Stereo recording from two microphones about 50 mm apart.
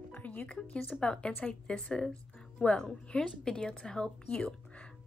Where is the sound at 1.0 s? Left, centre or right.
Left.